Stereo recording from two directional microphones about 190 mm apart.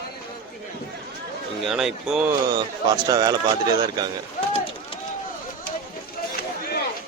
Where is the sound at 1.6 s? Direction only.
Centre (ahead or behind).